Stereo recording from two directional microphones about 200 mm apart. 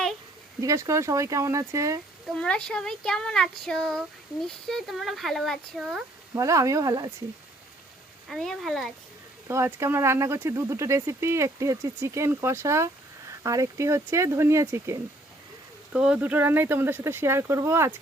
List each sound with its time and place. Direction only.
0.6 s speech: 15° right (ahead or behind)
2.3 s speech: 5° left (ahead or behind)
6.3 s speech: 15° right (ahead or behind)
8.3 s speech: centre (ahead or behind)
9.5 s speech: 10° right (ahead or behind)
15.9 s speech: 5° right (ahead or behind)